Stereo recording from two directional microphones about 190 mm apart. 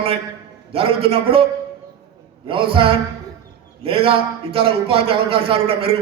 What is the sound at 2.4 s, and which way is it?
A man's voice, 30° right (ahead or behind).